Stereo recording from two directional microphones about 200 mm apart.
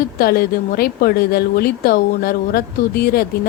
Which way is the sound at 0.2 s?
50° left (ahead or behind).